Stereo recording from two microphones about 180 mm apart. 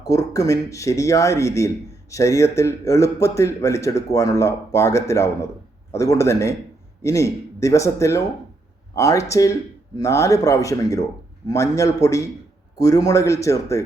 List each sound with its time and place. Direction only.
0.0 s speech: 20° left (ahead or behind)